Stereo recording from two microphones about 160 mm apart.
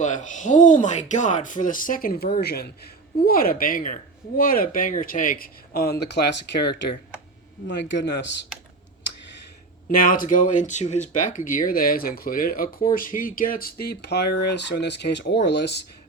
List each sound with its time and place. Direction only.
0.0 s speech: 50° left (ahead or behind); by 2.6 s 80° left
3.2 s speech: 65° left (ahead or behind); by 8.4 s 90° left
9.9 s speech: 60° left (ahead or behind); by 15.8 s 90° left